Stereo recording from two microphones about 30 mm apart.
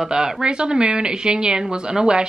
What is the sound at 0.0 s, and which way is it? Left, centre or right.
Speech, centre.